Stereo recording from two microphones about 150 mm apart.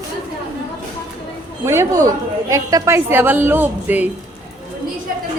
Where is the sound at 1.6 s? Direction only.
20° right (ahead or behind).